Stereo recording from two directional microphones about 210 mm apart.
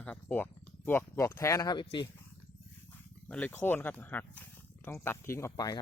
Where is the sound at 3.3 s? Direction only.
10° left (ahead or behind).